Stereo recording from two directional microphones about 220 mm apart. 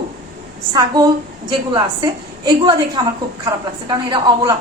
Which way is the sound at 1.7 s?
20° right (ahead or behind).